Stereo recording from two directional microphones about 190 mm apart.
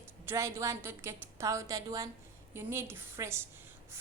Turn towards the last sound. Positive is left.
turn(degrees=-15)  # may be behind; listen again after turning